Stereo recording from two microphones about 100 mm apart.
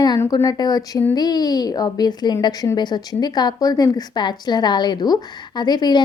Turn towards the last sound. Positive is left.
turn(degrees=45)  # may be behind; listen again after turning